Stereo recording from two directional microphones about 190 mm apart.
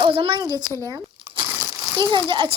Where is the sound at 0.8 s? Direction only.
20° right (ahead or behind).